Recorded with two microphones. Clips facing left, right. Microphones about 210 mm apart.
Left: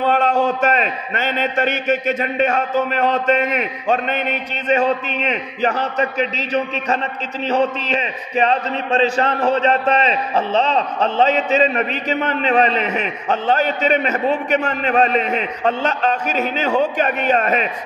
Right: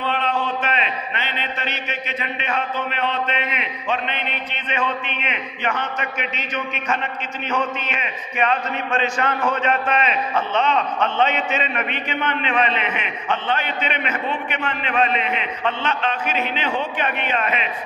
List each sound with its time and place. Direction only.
0.0 s a man's voice: 45° left (ahead or behind)